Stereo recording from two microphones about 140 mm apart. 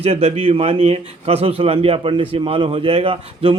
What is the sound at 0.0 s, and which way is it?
A man's voice, 50° right (ahead or behind).